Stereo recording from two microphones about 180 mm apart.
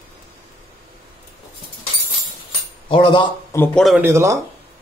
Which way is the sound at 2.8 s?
30° left (ahead or behind).